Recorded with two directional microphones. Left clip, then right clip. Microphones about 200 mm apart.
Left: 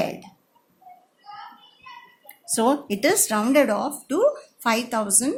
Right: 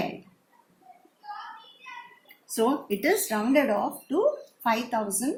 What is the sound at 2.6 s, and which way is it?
A woman's voice, 55° left (ahead or behind).